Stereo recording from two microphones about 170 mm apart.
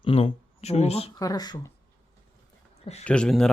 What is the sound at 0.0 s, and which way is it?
Speech, 35° left (ahead or behind).